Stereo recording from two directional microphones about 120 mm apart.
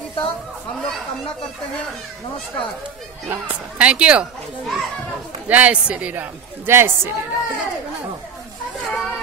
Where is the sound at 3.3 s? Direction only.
10° right (ahead or behind).